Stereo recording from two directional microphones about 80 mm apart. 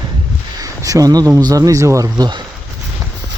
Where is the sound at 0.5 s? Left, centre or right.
Right.